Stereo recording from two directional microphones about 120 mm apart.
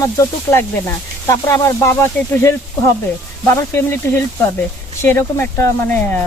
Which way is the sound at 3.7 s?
20° left (ahead or behind).